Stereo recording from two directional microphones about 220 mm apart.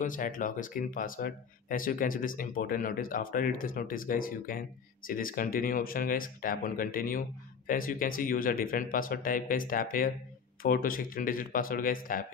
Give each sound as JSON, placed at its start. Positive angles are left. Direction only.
{"t": 0.0, "sound": "speech", "side_deg": 35}